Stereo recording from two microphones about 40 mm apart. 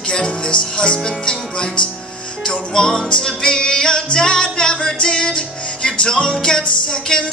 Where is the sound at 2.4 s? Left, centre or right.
Left.